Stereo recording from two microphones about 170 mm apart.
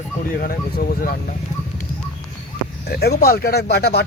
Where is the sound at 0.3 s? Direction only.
55° left (ahead or behind).